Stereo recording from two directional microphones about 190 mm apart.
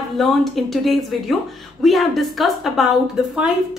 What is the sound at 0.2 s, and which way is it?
A woman's voice, centre (ahead or behind).